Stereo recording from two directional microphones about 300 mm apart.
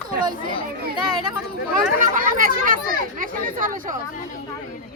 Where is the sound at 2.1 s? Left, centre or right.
Right.